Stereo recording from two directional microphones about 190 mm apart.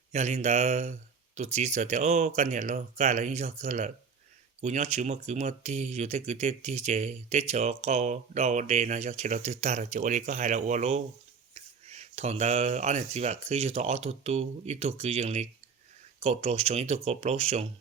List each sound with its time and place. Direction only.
0.1 s speech: 35° right (ahead or behind)